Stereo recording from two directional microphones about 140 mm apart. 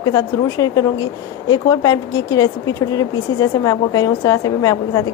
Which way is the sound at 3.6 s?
25° left (ahead or behind).